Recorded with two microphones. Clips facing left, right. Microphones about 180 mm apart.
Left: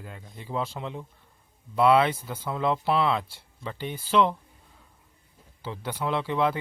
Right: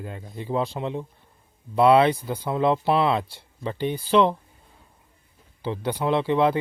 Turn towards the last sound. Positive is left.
turn(degrees=-25)  # may be behind; listen again after turning